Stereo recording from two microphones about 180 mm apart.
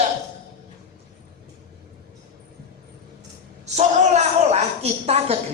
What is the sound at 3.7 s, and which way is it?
Speech, 40° right (ahead or behind).